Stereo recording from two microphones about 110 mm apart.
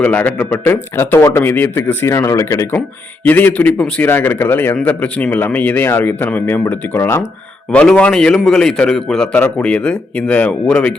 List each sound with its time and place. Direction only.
0.0 s a man's voice: 15° left (ahead or behind)
3.2 s a man's voice: 15° left (ahead or behind)
7.7 s a man's voice: 10° left (ahead or behind)